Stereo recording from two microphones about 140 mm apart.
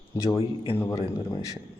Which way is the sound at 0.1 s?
25° left (ahead or behind).